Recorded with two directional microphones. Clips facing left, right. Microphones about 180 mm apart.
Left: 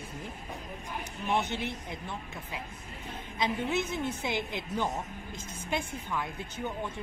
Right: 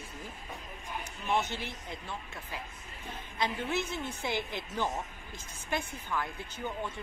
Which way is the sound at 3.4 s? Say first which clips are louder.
Left 2 dB; 15° left (ahead or behind).